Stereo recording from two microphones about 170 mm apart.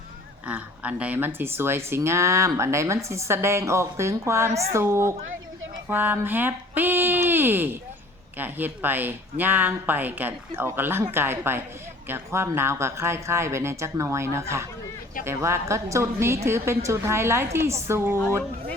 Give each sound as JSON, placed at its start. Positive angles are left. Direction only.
{"t": 0.4, "sound": "speech", "side_deg": -10}